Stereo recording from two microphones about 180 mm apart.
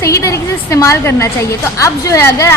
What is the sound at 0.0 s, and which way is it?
A woman's voice, 15° left (ahead or behind).